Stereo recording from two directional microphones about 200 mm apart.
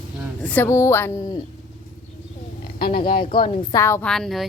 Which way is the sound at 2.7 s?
50° left (ahead or behind).